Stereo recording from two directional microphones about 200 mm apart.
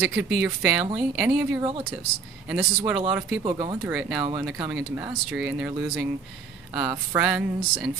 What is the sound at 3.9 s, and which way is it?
Speech, 5° right (ahead or behind).